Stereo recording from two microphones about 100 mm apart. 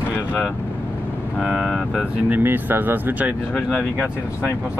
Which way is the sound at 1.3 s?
5° right (ahead or behind).